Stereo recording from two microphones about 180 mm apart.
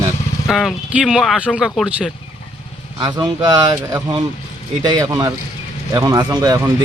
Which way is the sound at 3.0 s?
20° right (ahead or behind).